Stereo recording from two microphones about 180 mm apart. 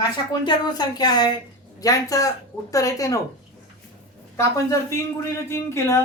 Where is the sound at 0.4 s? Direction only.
20° left (ahead or behind).